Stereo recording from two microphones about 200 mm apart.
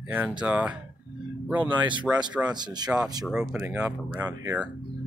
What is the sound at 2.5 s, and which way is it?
Speech, 20° right (ahead or behind).